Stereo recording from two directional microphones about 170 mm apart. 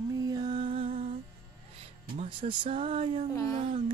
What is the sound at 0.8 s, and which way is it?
Humming, 45° right (ahead or behind).